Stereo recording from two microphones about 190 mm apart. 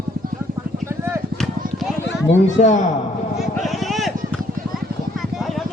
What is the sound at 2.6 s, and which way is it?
Speech, 40° left (ahead or behind).